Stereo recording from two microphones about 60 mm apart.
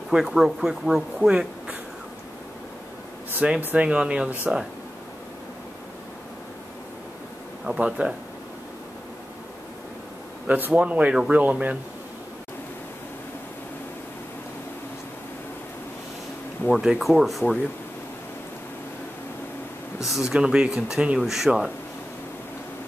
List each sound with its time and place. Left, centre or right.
0.1 s speech: centre
3.4 s speech: centre
7.7 s speech: right
10.4 s speech: right
16.6 s speech: centre
20.1 s speech: centre